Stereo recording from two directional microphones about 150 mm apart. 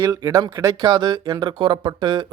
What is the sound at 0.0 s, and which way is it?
Speech, 25° right (ahead or behind).